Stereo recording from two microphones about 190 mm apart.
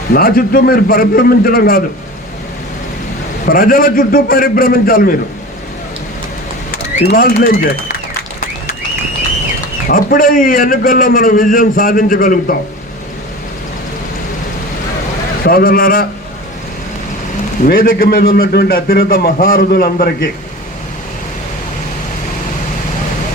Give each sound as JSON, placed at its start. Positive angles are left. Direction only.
{"t": 0.1, "sound": "a man's voice", "side_deg": 50}
{"t": 3.4, "sound": "a man's voice", "side_deg": 50}
{"t": 7.4, "sound": "a man's voice", "side_deg": 50}
{"t": 9.9, "sound": "a man's voice", "side_deg": 45}
{"t": 15.4, "sound": "a man's voice", "side_deg": 50}
{"t": 17.7, "sound": "a man's voice", "side_deg": 50}